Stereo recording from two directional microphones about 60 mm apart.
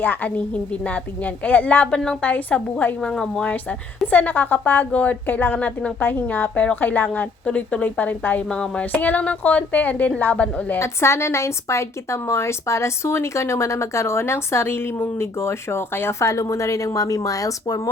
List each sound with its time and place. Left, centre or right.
0.0 s a woman's voice: left; by 3.4 s centre
3.4 s speech: left
5.5 s a woman's voice: left
8.4 s a woman's voice: centre
10.8 s a woman's voice: left